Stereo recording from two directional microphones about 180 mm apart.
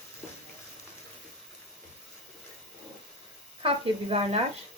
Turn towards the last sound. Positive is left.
turn(degrees=-30)  # may be behind; listen again after turning